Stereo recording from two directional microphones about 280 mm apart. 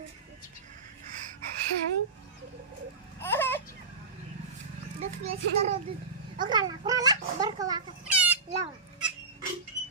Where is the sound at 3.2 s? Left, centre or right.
Centre.